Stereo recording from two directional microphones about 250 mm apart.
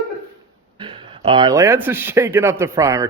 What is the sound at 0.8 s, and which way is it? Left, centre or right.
Speech, centre.